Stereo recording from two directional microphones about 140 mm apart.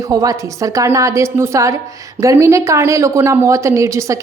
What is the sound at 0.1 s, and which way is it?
A woman's voice, 25° right (ahead or behind).